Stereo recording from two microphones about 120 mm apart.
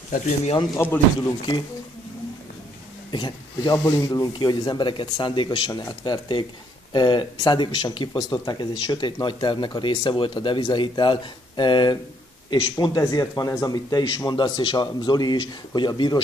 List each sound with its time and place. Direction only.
0.1 s speech: 90° left
0.7 s speech: 15° left (ahead or behind)
3.1 s speech: 40° left (ahead or behind)